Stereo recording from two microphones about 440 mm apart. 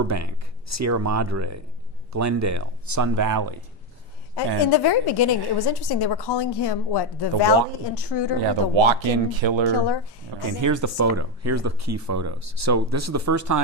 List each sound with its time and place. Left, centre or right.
0.0 s speech: right
4.4 s a woman's voice: left
8.7 s speech: right
9.6 s a woman's voice: left
10.4 s speech: right